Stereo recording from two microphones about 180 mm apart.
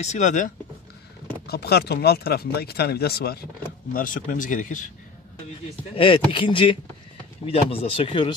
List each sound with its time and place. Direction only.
0.0 s speech: 40° left (ahead or behind)
1.5 s speech: 60° left (ahead or behind)
3.9 s speech: 50° left (ahead or behind)
5.9 s speech: 30° left (ahead or behind)